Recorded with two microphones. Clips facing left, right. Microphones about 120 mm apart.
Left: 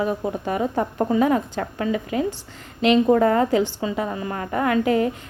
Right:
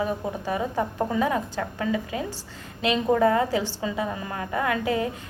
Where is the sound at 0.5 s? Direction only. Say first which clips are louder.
Left 3 dB; 25° left (ahead or behind).